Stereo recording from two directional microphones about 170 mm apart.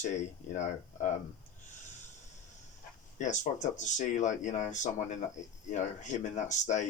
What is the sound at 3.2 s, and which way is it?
Speech, 45° left (ahead or behind).